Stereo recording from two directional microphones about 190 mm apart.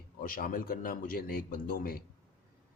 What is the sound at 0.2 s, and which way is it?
Speech, 50° left (ahead or behind).